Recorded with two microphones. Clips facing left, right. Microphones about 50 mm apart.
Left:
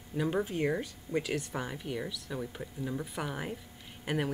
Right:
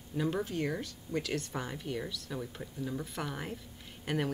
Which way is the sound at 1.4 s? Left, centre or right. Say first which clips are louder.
Left 1 dB; centre.